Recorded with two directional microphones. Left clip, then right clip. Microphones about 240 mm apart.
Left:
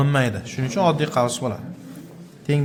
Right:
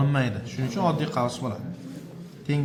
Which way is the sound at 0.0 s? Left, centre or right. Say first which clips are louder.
Left 6 dB; left.